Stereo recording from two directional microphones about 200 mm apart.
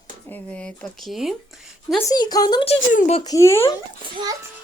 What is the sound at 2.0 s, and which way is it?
Speech, 20° left (ahead or behind).